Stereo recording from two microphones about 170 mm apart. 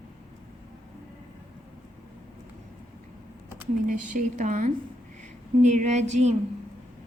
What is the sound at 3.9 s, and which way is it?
A woman's voice, 50° right (ahead or behind).